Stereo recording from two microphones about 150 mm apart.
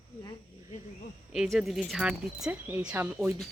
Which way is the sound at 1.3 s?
Centre (ahead or behind).